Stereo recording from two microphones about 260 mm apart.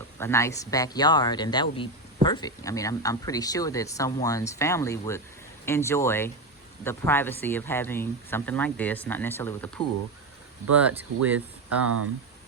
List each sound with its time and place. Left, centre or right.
0.2 s speech: centre
10.8 s speech: centre
11.9 s speech: right